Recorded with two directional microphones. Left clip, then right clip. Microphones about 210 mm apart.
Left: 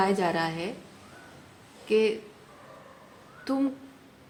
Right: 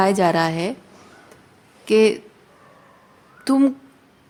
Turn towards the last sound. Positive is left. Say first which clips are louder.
# right 11 dB
turn(degrees=-55)  # may be behind; listen again after turning